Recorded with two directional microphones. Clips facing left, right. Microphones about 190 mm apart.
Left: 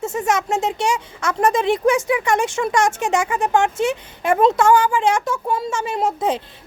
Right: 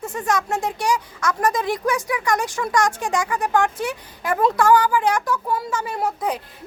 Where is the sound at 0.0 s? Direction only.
25° left (ahead or behind).